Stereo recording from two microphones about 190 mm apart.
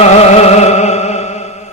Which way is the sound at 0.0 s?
35° left (ahead or behind).